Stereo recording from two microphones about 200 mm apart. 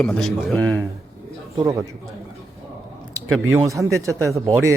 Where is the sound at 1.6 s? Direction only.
15° right (ahead or behind).